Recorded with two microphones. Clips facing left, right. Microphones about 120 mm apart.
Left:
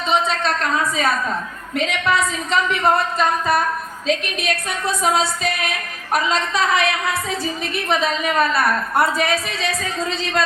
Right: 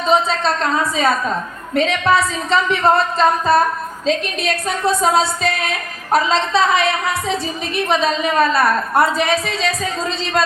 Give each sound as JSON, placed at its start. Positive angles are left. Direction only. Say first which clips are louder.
{"t": 0.1, "sound": "a woman's voice", "louder": "right 3 dB", "side_deg": -30}